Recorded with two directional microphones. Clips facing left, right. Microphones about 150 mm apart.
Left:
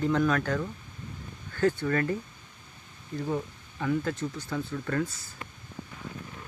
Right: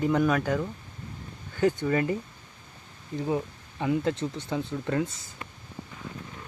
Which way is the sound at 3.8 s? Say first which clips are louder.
Right 2 dB; 25° right (ahead or behind).